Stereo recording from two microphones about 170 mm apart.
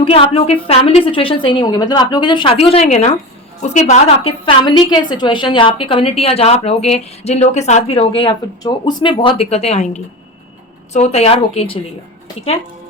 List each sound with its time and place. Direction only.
0.0 s a woman's voice: 35° left (ahead or behind)